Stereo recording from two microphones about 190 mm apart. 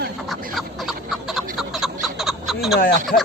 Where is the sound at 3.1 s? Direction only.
45° left (ahead or behind).